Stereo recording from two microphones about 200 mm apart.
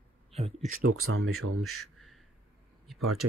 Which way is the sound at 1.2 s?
90° right.